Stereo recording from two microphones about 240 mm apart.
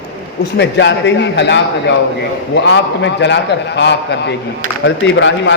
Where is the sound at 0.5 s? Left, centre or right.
Left.